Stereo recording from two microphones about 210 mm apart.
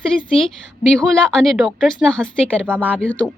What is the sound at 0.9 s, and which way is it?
A woman's voice, 5° left (ahead or behind).